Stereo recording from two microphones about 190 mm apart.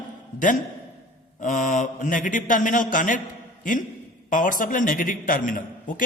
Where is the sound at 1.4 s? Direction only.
40° left (ahead or behind).